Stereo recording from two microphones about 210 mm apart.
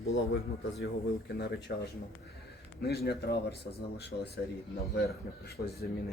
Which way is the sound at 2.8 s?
50° left (ahead or behind).